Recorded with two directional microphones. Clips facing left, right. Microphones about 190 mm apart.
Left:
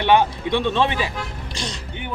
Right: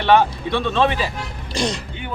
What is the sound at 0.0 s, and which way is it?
Speech, 15° left (ahead or behind).